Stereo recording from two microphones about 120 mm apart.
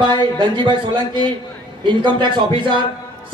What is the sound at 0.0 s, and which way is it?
A man's voice, 35° right (ahead or behind).